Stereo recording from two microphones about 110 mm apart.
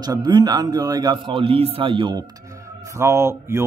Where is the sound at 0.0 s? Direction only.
35° right (ahead or behind).